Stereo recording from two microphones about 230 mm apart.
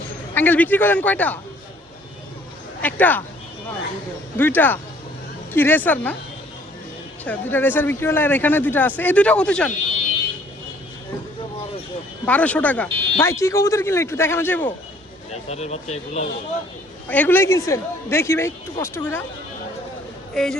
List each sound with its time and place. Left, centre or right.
0.3 s speech: centre
2.8 s speech: centre
4.4 s speech: centre
7.3 s speech: centre
12.2 s speech: centre
15.3 s speech: left
17.1 s speech: centre
20.3 s speech: centre